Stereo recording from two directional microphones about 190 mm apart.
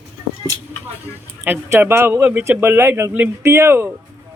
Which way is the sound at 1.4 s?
10° right (ahead or behind).